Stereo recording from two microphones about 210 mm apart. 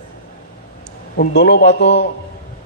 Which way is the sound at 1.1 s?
50° left (ahead or behind).